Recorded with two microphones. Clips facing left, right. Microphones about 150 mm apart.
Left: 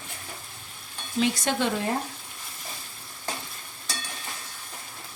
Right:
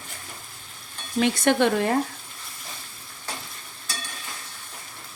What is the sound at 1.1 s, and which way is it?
Speech, 60° right (ahead or behind).